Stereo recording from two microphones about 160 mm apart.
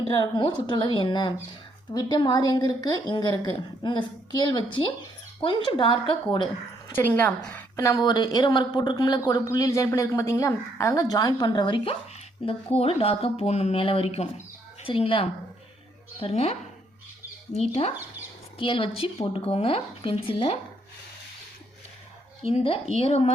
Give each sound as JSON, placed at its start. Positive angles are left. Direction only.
{"t": 0.2, "sound": "a woman's voice", "side_deg": 30}
{"t": 6.9, "sound": "a woman's voice", "side_deg": 10}
{"t": 22.4, "sound": "speech", "side_deg": 35}